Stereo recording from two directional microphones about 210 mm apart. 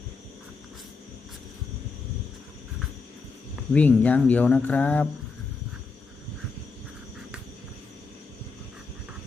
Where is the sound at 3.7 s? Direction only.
5° left (ahead or behind).